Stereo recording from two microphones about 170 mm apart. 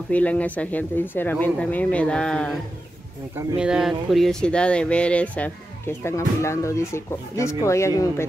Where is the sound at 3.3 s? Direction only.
20° right (ahead or behind).